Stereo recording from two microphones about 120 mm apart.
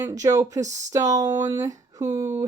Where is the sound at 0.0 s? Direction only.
30° right (ahead or behind).